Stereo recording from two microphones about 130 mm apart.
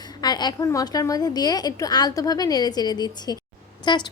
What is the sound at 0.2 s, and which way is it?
A woman's voice, 30° left (ahead or behind).